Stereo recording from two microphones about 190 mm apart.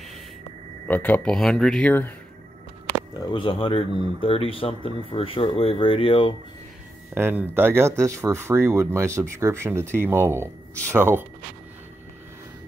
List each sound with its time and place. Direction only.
0.8 s speech: 10° left (ahead or behind)
3.2 s speech: 25° left (ahead or behind)
7.2 s speech: 10° right (ahead or behind)